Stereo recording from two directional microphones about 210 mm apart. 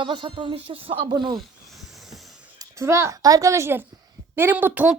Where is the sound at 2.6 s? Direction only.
15° right (ahead or behind).